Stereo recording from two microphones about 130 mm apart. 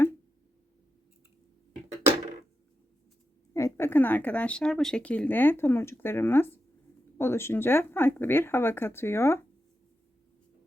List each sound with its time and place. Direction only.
3.5 s speech: 20° left (ahead or behind)